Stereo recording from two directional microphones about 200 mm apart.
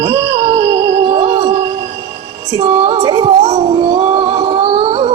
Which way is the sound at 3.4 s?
30° right (ahead or behind).